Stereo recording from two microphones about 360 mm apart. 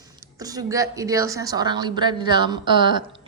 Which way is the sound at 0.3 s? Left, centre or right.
Centre.